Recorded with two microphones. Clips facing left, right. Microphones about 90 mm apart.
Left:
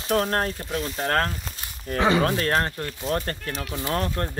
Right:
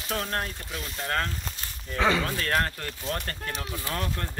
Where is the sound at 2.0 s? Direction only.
20° left (ahead or behind).